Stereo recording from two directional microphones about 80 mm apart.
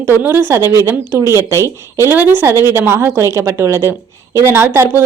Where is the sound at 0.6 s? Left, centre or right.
Left.